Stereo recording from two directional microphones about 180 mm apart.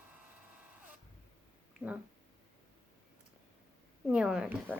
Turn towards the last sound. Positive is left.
turn(degrees=-5)  # may be behind; listen again after turning